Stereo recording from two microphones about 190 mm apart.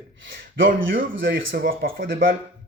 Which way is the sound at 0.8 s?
85° right.